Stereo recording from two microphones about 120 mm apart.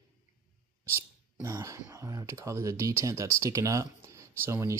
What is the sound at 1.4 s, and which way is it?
Speech, 25° right (ahead or behind).